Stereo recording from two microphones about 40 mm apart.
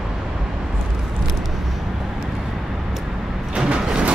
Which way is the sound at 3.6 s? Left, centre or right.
Right.